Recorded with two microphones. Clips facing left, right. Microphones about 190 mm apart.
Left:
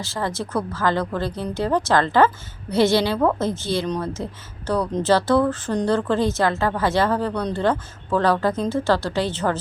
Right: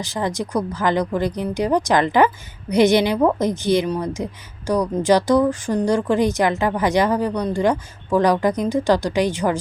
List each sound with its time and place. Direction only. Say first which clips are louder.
0.0 s speech: right 3 dB; 15° right (ahead or behind)